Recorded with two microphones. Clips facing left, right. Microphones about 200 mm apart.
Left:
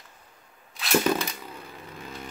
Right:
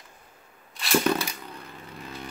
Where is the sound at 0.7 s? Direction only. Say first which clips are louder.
Even; 5° left (ahead or behind).